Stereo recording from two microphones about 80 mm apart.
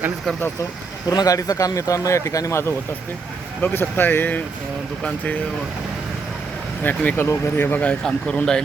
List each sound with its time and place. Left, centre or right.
1.1 s speech: left
3.6 s speech: left
6.8 s speech: left